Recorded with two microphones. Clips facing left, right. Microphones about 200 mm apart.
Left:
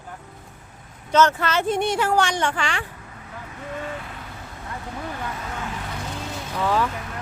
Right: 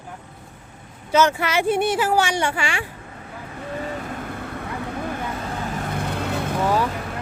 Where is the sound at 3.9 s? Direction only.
45° right (ahead or behind).